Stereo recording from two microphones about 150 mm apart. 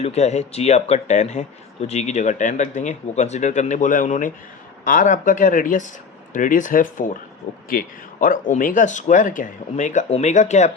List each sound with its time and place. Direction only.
0.0 s speech: 45° left (ahead or behind)